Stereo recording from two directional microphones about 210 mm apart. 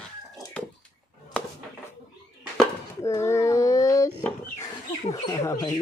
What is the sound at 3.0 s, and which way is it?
Child singing, 15° left (ahead or behind).